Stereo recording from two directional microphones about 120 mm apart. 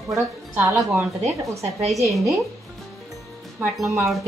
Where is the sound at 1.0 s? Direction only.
Centre (ahead or behind).